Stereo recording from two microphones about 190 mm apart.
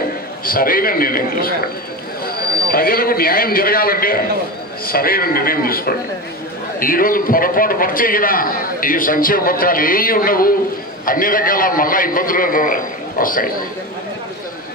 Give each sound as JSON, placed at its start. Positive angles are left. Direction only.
{"t": 0.5, "sound": "a man's voice", "side_deg": 50}